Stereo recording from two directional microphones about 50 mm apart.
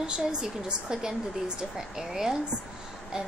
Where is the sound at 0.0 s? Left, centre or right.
Centre.